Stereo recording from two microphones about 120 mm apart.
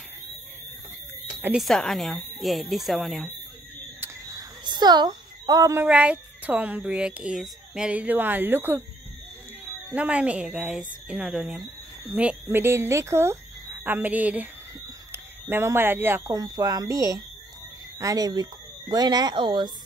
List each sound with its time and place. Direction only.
1.6 s speech: centre (ahead or behind)
4.0 s a sound: 30° right (ahead or behind)
5.8 s a woman's voice: 10° right (ahead or behind)
16.3 s speech: 30° right (ahead or behind)